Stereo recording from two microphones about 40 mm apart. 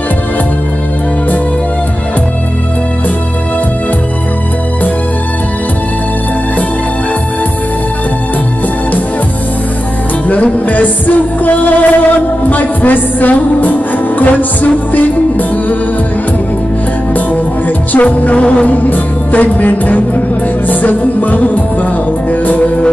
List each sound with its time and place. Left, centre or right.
10.2 s music: left
17.9 s music: left
18.7 s music: left